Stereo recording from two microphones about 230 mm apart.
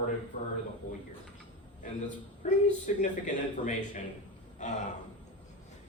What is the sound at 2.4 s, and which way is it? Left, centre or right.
Speech, left.